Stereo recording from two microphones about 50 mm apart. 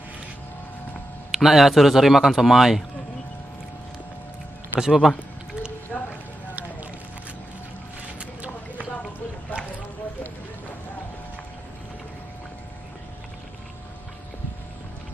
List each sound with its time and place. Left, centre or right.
1.3 s a man's voice: centre
4.7 s speech: centre
5.9 s a sound: left